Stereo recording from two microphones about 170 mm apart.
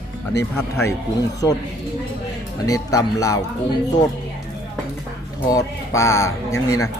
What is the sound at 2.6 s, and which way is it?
Speech, 20° left (ahead or behind).